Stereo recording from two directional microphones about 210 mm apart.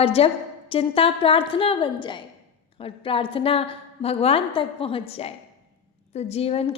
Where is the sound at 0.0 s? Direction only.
30° left (ahead or behind).